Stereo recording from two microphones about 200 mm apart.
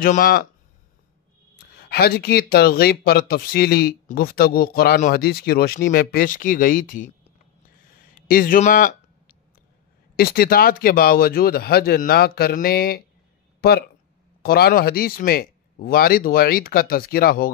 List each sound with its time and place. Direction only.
0.0 s speech: 45° left (ahead or behind)
1.8 s speech: 50° left (ahead or behind)
8.1 s a sound: 45° left (ahead or behind)
10.1 s speech: 50° left (ahead or behind)